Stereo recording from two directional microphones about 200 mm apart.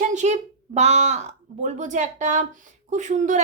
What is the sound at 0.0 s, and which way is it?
Speech, 35° right (ahead or behind).